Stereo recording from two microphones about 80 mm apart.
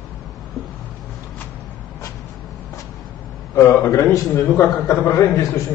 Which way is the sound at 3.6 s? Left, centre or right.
Left.